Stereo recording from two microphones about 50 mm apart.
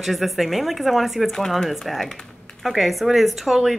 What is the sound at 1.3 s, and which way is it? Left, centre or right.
Speech, centre.